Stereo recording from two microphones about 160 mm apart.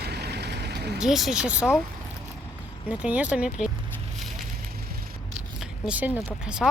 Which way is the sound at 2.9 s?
10° right (ahead or behind).